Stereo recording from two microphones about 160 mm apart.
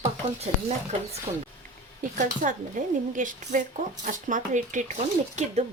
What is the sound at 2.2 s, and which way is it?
Speech, 55° right (ahead or behind).